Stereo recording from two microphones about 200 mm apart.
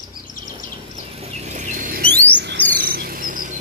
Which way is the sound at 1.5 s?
40° right (ahead or behind).